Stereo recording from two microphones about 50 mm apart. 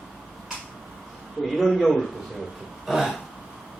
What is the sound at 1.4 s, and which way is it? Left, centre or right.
A man's voice, centre.